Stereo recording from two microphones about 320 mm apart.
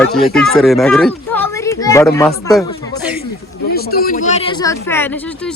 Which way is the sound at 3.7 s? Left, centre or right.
Left.